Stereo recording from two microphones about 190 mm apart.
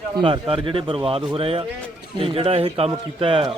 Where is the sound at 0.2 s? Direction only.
30° right (ahead or behind).